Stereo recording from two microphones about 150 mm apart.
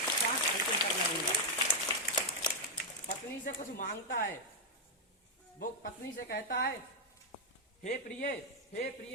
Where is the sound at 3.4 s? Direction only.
60° left (ahead or behind).